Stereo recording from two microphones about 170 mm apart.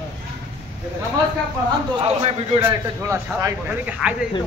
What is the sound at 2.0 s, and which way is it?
Speech, 40° right (ahead or behind).